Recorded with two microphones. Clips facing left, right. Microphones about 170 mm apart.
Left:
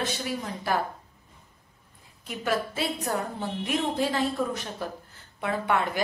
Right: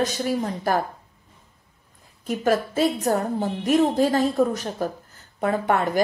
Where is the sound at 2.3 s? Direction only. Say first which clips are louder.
Right 7 dB; 45° right (ahead or behind).